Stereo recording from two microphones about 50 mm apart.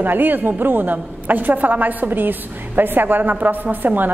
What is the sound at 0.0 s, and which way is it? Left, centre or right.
A woman's voice, right.